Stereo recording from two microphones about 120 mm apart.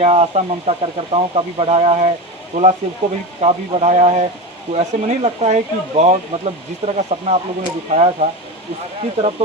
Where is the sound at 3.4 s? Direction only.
65° right (ahead or behind).